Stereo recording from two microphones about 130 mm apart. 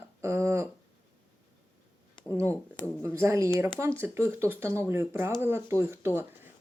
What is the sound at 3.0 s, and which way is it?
A man's voice, 20° right (ahead or behind).